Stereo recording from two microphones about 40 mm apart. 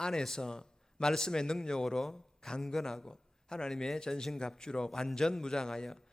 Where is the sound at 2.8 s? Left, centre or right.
Centre.